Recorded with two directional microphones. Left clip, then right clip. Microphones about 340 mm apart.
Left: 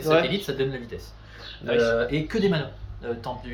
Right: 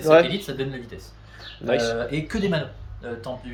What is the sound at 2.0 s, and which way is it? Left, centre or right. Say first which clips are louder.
Speech: left 2 dB; centre.